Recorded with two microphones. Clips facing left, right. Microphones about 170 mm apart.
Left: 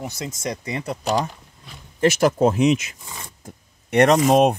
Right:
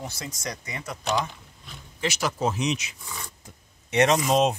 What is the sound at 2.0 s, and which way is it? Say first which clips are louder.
Speech: left 10 dB; 50° left (ahead or behind).